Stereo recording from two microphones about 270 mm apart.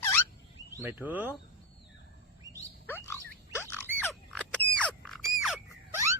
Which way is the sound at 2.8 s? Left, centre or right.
Centre.